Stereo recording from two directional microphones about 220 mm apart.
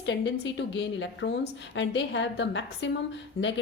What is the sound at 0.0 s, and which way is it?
A woman's voice, 55° left (ahead or behind).